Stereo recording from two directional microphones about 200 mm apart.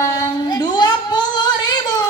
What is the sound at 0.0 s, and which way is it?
Singing, 20° left (ahead or behind).